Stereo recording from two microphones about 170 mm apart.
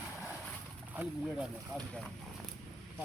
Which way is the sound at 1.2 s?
5° right (ahead or behind).